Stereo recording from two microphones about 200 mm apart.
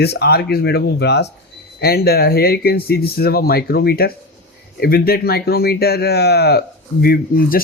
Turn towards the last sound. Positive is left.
turn(degrees=45)  # may be behind; listen again after turning